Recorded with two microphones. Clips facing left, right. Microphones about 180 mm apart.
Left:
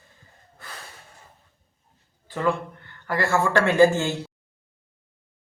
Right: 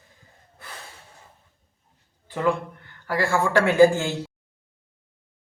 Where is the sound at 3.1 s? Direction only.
10° right (ahead or behind).